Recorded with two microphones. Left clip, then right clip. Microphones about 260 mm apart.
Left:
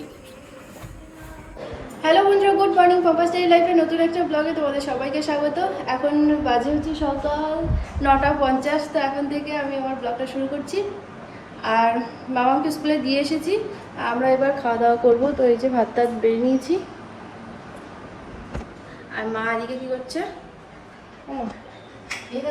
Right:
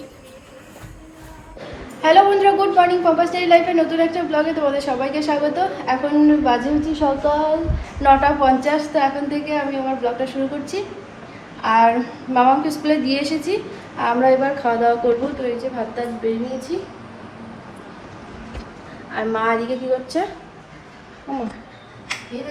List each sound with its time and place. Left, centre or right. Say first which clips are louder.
1.6 s a woman's voice: right 4 dB; centre; by 16.8 s left
19.1 s a woman's voice: right 5 dB; centre